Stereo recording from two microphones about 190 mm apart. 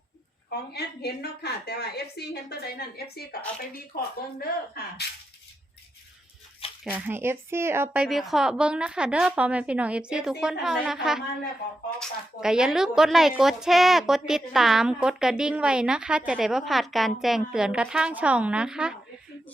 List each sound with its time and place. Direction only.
0.7 s a woman's voice: 60° left (ahead or behind)
6.9 s speech: 10° right (ahead or behind)
8.0 s a woman's voice: centre (ahead or behind)